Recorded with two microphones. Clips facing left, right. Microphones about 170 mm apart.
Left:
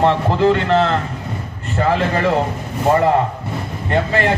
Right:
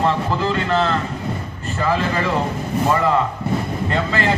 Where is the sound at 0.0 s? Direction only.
65° left (ahead or behind).